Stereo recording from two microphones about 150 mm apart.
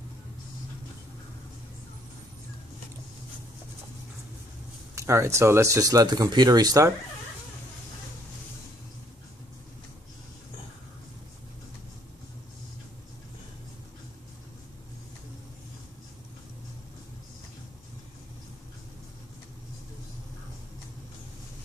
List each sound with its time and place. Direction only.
4.9 s speech: 15° right (ahead or behind)